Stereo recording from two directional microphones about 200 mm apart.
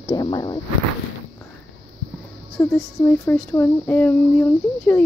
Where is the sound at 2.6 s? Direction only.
10° left (ahead or behind).